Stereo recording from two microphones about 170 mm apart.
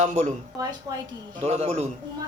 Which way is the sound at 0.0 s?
45° right (ahead or behind).